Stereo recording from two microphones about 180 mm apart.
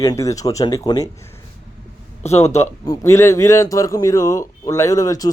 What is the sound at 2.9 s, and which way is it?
A man's voice, 15° left (ahead or behind).